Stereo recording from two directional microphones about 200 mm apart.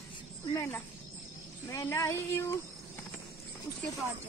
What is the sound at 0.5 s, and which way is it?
Child singing, 15° left (ahead or behind).